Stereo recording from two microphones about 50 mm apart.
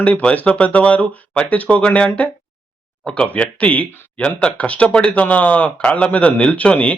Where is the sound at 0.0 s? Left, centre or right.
Left.